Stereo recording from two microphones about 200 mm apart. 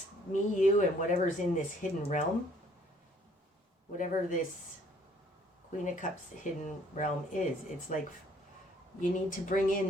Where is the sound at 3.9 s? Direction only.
40° left (ahead or behind).